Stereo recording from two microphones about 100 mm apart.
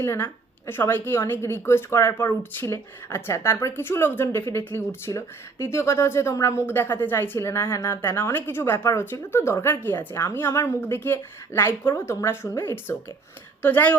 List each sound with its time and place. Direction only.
0.0 s speech: 25° left (ahead or behind)